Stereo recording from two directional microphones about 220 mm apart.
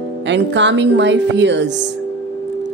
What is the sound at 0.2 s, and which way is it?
A woman's voice, 55° right (ahead or behind).